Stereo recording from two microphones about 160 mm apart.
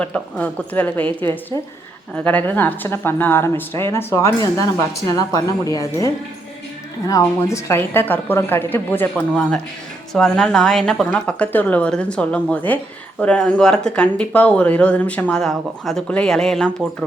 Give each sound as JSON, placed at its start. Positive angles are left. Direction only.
{"t": 0.0, "sound": "speech", "side_deg": 10}
{"t": 7.1, "sound": "speech", "side_deg": 20}